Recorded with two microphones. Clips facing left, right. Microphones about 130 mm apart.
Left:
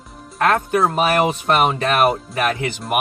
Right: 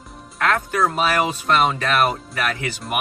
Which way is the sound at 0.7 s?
30° left (ahead or behind).